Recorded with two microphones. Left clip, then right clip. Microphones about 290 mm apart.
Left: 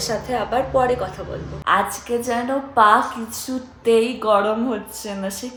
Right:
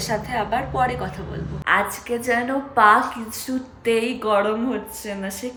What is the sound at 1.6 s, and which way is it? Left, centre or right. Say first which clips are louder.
A woman's voice: left 1 dB; centre.